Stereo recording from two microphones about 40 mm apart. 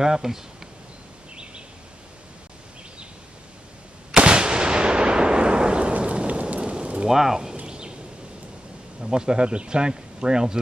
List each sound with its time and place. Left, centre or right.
0.0 s speech: centre
1.3 s a sound: right
4.1 s artillery fire: right
5.9 s rain: right
7.1 s speech: centre
7.6 s a sound: right
9.0 s speech: centre